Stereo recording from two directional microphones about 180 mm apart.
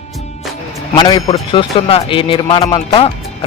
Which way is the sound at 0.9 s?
25° left (ahead or behind).